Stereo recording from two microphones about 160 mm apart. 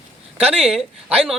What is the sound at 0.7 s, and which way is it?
Speech, 5° right (ahead or behind).